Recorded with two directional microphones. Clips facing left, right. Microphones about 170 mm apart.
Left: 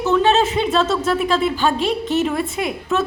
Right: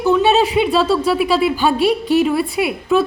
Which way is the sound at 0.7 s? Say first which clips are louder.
Right 2 dB; 10° right (ahead or behind).